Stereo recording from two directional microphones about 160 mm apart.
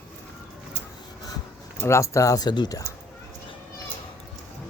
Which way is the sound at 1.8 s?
20° left (ahead or behind).